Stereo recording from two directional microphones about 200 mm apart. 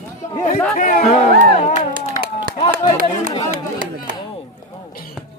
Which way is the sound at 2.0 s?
45° right (ahead or behind).